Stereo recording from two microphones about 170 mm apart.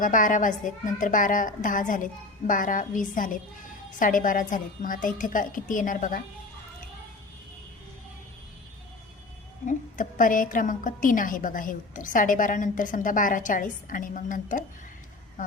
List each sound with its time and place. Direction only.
0.0 s a woman's voice: 50° left (ahead or behind)
9.6 s a woman's voice: 50° left (ahead or behind)